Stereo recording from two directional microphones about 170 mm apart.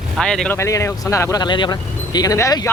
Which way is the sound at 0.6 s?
20° left (ahead or behind).